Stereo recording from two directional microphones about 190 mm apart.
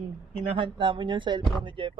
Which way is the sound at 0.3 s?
25° right (ahead or behind).